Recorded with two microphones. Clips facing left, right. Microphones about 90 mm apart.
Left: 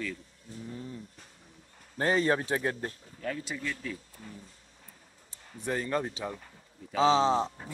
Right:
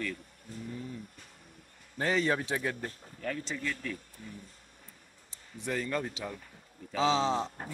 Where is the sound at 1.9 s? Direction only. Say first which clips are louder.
Left 3 dB; 40° left (ahead or behind).